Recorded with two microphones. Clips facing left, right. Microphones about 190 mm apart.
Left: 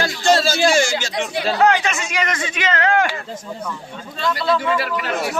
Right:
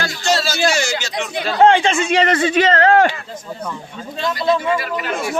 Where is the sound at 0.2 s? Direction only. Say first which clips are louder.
Left 2 dB; 50° left (ahead or behind).